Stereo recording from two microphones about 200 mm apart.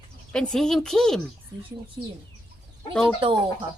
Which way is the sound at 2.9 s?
5° left (ahead or behind).